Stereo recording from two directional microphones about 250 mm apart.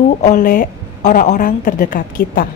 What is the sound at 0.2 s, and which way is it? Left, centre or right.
A woman's voice, left.